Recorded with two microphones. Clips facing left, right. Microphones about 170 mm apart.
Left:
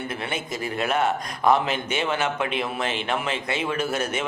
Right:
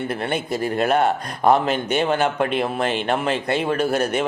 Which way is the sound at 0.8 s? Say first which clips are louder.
Right 4 dB; 35° right (ahead or behind).